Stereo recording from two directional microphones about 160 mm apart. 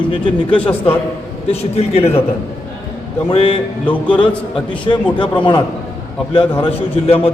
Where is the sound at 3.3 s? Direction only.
35° left (ahead or behind).